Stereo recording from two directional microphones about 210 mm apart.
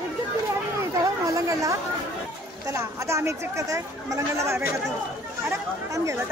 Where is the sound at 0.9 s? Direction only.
15° right (ahead or behind).